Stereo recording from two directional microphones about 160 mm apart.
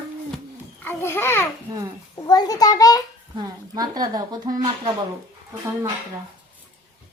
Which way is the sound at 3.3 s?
25° right (ahead or behind).